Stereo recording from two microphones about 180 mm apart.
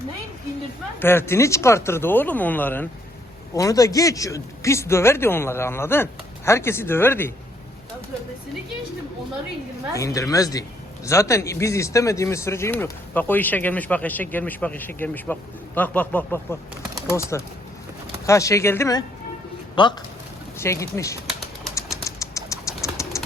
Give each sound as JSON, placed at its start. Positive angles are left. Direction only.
{"t": 0.9, "sound": "speech", "side_deg": 10}
{"t": 9.9, "sound": "speech", "side_deg": 15}
{"t": 21.8, "sound": "bird", "side_deg": 15}